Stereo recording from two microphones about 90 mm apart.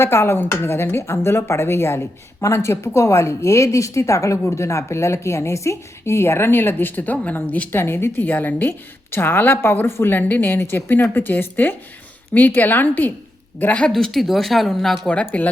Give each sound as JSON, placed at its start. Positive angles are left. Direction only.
{"t": 0.0, "sound": "speech", "side_deg": 30}
{"t": 15.0, "sound": "speech", "side_deg": 15}